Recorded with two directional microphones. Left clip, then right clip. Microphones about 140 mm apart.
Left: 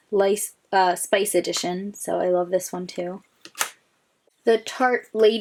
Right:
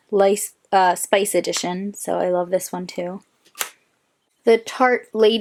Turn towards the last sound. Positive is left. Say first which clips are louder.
# right 2 dB
turn(degrees=-35)  # may be behind; listen again after turning